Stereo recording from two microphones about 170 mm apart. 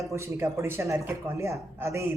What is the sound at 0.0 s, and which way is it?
Speech, 15° right (ahead or behind).